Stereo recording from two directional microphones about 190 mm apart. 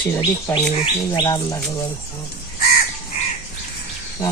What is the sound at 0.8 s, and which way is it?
Speech, 20° left (ahead or behind).